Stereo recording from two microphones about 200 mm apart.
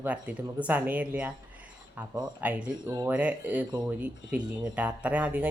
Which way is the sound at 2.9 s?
20° right (ahead or behind).